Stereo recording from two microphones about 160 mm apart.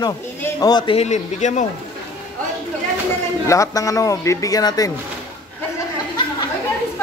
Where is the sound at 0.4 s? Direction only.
25° left (ahead or behind).